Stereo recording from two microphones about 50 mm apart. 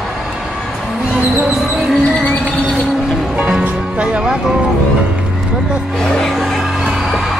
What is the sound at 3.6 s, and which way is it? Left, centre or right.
Music, right.